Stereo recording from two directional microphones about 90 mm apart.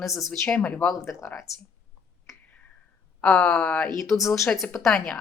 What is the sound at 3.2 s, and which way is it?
Speech, 10° left (ahead or behind).